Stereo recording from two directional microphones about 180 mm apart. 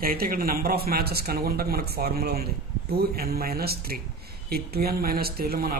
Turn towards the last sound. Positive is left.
turn(degrees=-55)  # may be behind; listen again after turning